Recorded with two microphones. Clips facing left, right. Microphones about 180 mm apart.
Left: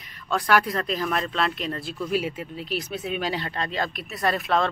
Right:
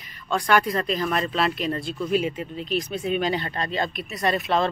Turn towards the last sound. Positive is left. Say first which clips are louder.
# right 1 dB
turn(degrees=0)  # may be behind; listen again after turning